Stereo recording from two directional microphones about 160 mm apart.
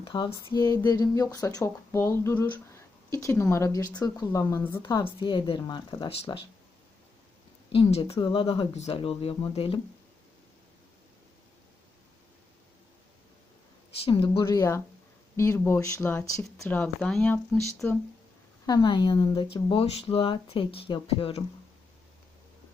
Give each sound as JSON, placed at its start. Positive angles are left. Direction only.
{"t": 0.0, "sound": "speech", "side_deg": 30}
{"t": 7.9, "sound": "speech", "side_deg": 40}
{"t": 14.0, "sound": "speech", "side_deg": 30}
{"t": 14.4, "sound": "speech", "side_deg": 20}
{"t": 18.6, "sound": "speech", "side_deg": 25}